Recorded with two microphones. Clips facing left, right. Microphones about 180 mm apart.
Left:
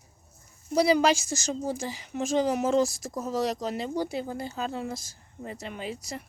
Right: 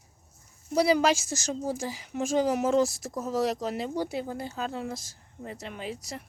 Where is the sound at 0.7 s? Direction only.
Centre (ahead or behind).